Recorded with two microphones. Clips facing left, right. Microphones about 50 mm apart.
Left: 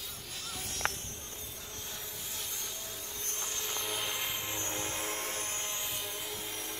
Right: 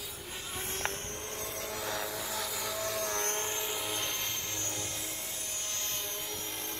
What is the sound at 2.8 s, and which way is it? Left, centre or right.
Vehicle, right.